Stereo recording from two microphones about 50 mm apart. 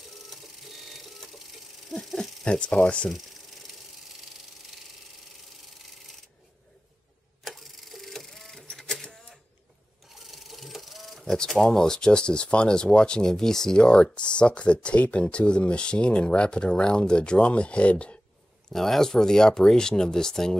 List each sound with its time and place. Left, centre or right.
0.3 s music: centre
2.4 s speech: centre
7.4 s cash register: centre
10.1 s a sound: centre
11.3 s speech: centre
18.7 s speech: centre